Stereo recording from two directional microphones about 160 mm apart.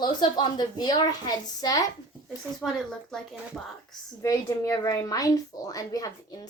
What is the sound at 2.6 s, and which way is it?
Speech, centre (ahead or behind).